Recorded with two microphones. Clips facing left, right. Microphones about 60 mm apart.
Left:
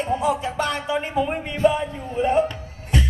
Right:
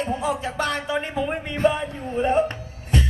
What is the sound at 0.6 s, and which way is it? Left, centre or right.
Speech, right.